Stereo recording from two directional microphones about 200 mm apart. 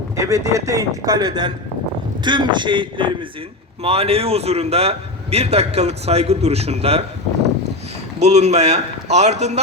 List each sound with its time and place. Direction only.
0.2 s a man's voice: 15° right (ahead or behind); by 7.0 s 30° right (ahead or behind)
8.2 s a man's voice: 35° right (ahead or behind)